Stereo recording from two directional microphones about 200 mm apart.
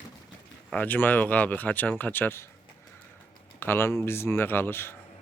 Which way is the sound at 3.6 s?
10° left (ahead or behind).